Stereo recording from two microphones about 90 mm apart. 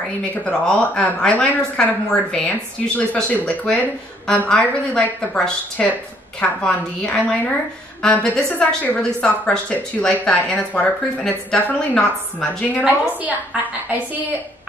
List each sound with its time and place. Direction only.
0.3 s a woman's voice: 10° left (ahead or behind)
12.8 s a woman's voice: 15° right (ahead or behind)